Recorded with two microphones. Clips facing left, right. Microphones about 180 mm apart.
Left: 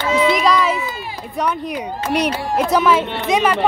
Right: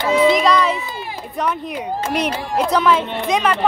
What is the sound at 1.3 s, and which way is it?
Speech, centre (ahead or behind).